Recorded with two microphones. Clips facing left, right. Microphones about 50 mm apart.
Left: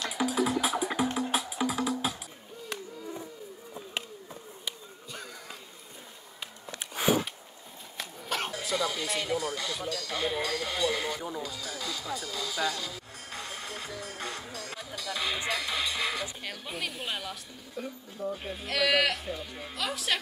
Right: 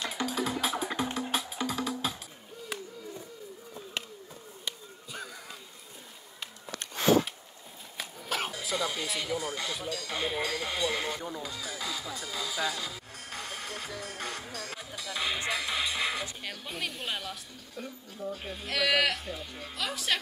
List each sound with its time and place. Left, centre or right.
0.1 s music: centre
2.7 s a sound: centre
4.6 s a sound: centre
6.8 s a sound: centre
8.0 s a sound: centre
8.7 s speech: right
9.0 s a woman's voice: centre
9.4 s speech: centre
11.1 s a woman's voice: centre
11.4 s speech: centre
13.3 s music: centre
14.5 s a woman's voice: centre